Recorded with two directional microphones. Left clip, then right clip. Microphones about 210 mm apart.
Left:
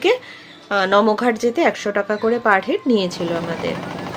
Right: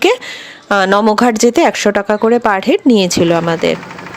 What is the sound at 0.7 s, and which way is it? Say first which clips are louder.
Speech: right 5 dB; 50° right (ahead or behind).